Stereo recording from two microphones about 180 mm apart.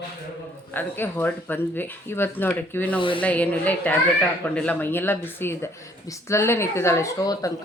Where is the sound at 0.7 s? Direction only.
10° left (ahead or behind).